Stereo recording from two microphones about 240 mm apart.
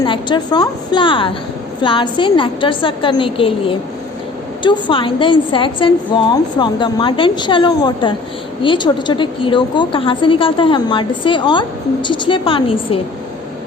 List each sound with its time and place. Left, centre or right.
0.0 s a woman's voice: centre